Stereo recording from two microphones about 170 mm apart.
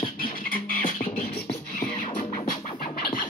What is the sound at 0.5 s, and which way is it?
Music, 55° left (ahead or behind).